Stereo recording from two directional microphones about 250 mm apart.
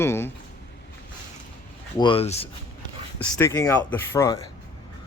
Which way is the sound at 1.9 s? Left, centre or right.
Centre.